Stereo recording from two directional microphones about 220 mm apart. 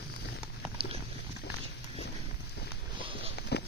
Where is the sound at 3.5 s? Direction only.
50° left (ahead or behind).